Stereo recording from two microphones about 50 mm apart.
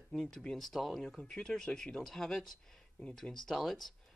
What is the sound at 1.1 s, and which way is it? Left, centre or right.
Speech, centre.